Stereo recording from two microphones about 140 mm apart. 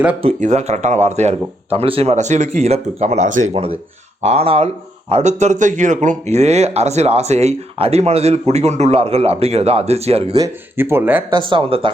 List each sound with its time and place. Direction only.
0.3 s speech: 55° right (ahead or behind)
10.3 s speech: 20° right (ahead or behind)
11.3 s speech: 35° right (ahead or behind)